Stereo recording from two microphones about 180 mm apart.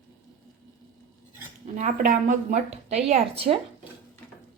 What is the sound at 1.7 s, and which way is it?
A woman's voice, 45° right (ahead or behind).